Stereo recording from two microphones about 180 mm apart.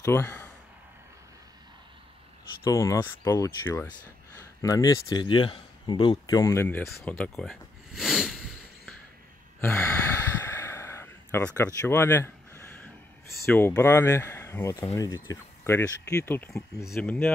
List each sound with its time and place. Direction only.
0.0 s speech: 15° left (ahead or behind)
2.6 s speech: 15° left (ahead or behind)
7.0 s a sound: 10° left (ahead or behind)
9.6 s sigh: 10° left (ahead or behind)
13.5 s speech: 15° left (ahead or behind)